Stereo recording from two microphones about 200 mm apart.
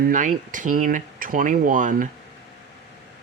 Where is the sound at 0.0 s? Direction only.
40° right (ahead or behind).